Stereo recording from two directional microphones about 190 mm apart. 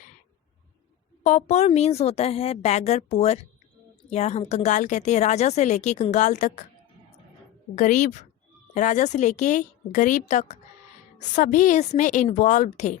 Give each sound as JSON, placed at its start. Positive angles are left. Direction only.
{"t": 1.2, "sound": "a woman's voice", "side_deg": 40}
{"t": 7.8, "sound": "a woman's voice", "side_deg": 40}